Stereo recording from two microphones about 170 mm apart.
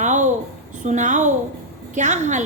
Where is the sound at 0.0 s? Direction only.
45° right (ahead or behind).